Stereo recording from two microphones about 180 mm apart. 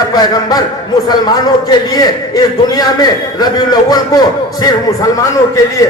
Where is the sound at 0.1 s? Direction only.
20° left (ahead or behind).